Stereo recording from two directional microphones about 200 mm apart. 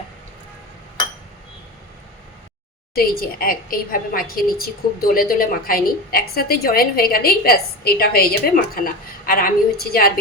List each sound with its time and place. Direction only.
2.9 s a woman's voice: 45° left (ahead or behind)